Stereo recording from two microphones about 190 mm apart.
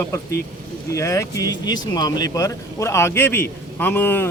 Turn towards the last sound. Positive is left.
turn(degrees=10)  # may be behind; listen again after turning